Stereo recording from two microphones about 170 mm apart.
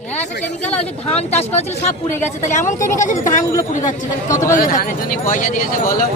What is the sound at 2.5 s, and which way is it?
Speech, 45° left (ahead or behind).